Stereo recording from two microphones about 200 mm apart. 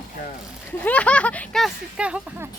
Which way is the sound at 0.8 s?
5° left (ahead or behind).